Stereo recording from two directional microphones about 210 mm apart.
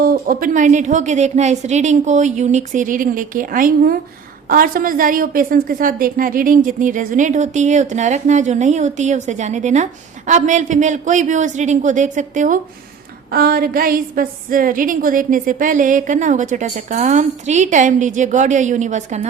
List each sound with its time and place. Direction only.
0.0 s a woman's voice: 45° right (ahead or behind)